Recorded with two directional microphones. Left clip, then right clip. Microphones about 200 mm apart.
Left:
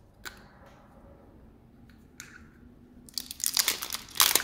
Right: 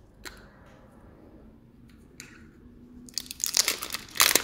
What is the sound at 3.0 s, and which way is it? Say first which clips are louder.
Crunch: right 2 dB; centre (ahead or behind).